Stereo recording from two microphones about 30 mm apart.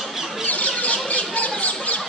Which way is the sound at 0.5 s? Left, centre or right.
Left.